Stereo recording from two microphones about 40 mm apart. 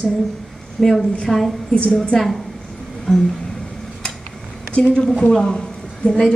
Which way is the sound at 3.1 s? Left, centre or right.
Centre.